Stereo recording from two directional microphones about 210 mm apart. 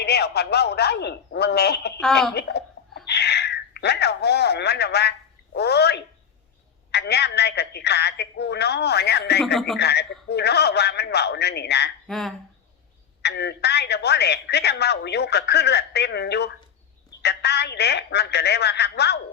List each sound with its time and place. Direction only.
0.0 s speech: 50° left (ahead or behind)
2.0 s speech: centre (ahead or behind)
2.3 s a sound: 50° left (ahead or behind)
5.5 s speech: 50° left (ahead or behind)
12.0 s speech: centre (ahead or behind)
13.2 s speech: 50° left (ahead or behind)